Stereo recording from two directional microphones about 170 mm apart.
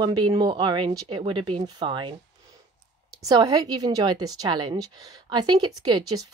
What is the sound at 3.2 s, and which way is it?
A woman's voice, 25° right (ahead or behind).